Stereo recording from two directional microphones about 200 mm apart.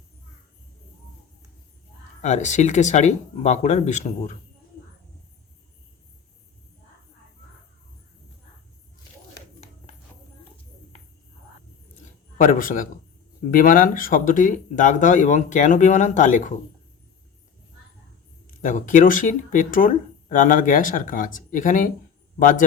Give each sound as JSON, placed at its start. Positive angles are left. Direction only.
{"t": 2.2, "sound": "speech", "side_deg": 35}
{"t": 12.4, "sound": "a man's voice", "side_deg": 45}
{"t": 18.6, "sound": "a man's voice", "side_deg": 40}